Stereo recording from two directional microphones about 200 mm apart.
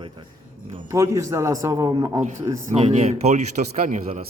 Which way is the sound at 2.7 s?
35° right (ahead or behind).